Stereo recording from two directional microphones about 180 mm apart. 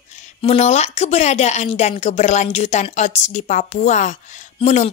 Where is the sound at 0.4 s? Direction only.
40° left (ahead or behind).